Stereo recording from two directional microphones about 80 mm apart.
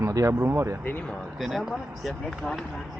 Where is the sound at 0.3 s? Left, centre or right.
Right.